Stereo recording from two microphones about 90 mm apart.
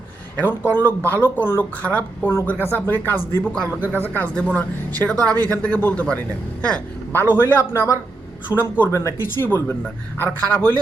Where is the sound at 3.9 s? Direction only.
20° left (ahead or behind).